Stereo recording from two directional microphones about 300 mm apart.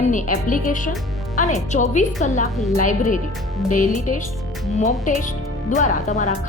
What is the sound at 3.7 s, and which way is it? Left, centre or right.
A woman's voice, left.